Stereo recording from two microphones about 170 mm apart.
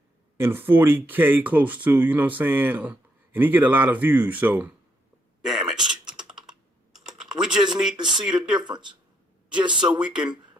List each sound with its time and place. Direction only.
0.3 s speech: 15° right (ahead or behind)
5.4 s typing: 5° right (ahead or behind)
8.0 s speech: 5° right (ahead or behind)
8.6 s speech: 25° right (ahead or behind)
9.8 s speech: 5° right (ahead or behind)